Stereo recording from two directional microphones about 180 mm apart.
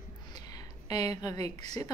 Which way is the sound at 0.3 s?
20° left (ahead or behind).